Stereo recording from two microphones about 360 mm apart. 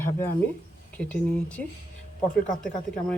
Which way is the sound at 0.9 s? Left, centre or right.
Centre.